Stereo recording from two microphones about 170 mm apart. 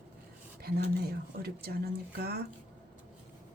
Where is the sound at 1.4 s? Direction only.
65° right (ahead or behind).